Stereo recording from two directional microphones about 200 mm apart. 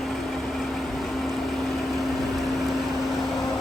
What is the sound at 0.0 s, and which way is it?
Vehicle, centre (ahead or behind).